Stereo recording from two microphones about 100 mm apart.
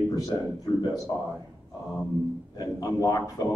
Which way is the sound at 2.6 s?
40° left (ahead or behind).